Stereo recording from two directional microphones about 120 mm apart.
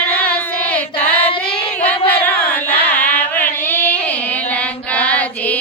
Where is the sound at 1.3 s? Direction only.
45° left (ahead or behind).